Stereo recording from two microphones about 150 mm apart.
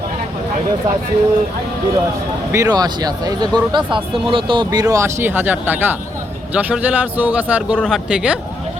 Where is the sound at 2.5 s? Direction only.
25° right (ahead or behind).